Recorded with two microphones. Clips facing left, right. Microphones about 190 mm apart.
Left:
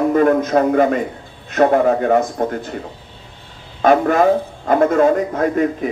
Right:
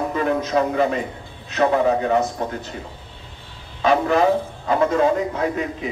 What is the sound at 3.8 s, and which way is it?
A man's voice, 50° left (ahead or behind).